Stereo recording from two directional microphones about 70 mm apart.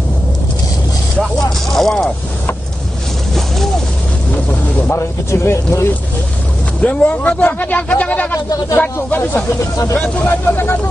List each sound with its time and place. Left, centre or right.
1.7 s a sound: centre
4.9 s speech: left
6.8 s speech: left
8.7 s speech: left